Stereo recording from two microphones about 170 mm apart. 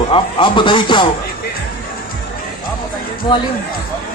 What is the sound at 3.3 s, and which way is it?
Speech, 25° left (ahead or behind).